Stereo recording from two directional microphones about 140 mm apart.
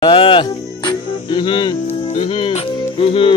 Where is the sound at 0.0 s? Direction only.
40° left (ahead or behind).